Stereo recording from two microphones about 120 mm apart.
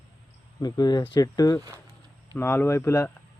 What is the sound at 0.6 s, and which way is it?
Speech, 35° left (ahead or behind).